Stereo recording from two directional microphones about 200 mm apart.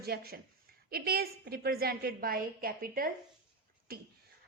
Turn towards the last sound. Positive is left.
turn(degrees=-50)  # may be behind; listen again after turning